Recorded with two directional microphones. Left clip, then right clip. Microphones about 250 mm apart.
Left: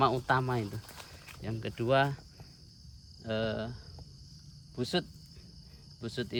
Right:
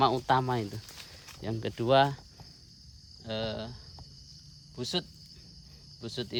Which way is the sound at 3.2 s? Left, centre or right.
Centre.